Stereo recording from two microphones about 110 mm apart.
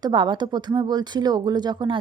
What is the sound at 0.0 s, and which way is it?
Speech, 45° right (ahead or behind).